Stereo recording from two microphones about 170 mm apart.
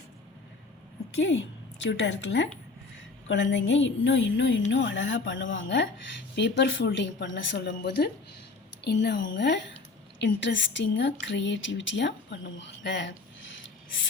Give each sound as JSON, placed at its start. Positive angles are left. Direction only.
{"t": 1.8, "sound": "speech", "side_deg": 90}